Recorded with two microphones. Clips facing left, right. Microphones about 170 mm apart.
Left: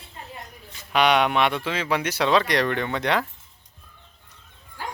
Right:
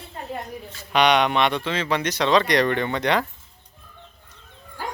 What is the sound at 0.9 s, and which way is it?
Speech, 5° left (ahead or behind).